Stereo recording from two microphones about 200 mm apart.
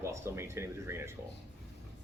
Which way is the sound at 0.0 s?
15° right (ahead or behind).